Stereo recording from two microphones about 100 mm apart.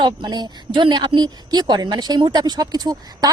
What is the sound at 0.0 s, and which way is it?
Speech, 45° right (ahead or behind).